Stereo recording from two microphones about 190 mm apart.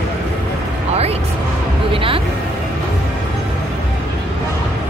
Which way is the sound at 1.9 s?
30° right (ahead or behind).